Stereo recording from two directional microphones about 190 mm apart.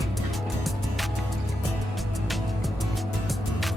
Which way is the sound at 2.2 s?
Centre (ahead or behind).